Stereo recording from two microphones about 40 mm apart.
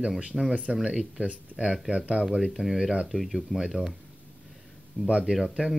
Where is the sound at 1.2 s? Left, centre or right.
Right.